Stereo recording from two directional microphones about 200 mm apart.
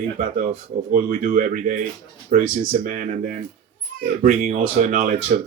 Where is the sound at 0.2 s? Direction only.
45° right (ahead or behind).